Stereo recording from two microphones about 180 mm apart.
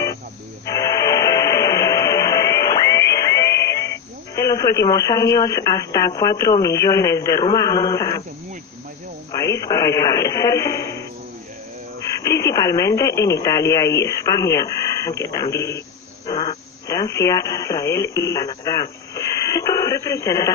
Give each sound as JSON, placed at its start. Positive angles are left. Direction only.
{"t": 0.6, "sound": "music", "side_deg": 20}
{"t": 9.3, "sound": "speech", "side_deg": 20}
{"t": 12.2, "sound": "speech", "side_deg": 20}